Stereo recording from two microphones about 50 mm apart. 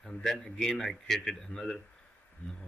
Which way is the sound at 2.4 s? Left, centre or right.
Left.